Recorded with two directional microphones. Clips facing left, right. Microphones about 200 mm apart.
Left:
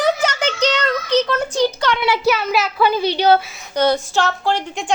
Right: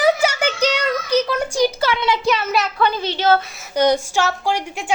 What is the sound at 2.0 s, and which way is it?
A child's voice, 10° left (ahead or behind).